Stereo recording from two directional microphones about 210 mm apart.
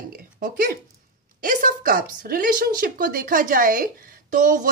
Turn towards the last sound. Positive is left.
turn(degrees=-40)  # may be behind; listen again after turning